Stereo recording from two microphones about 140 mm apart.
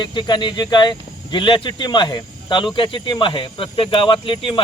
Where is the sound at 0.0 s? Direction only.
35° left (ahead or behind).